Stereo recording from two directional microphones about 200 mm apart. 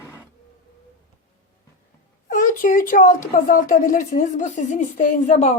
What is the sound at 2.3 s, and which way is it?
A woman's voice, 40° left (ahead or behind).